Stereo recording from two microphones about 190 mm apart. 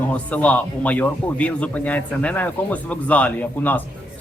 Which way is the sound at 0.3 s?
5° left (ahead or behind).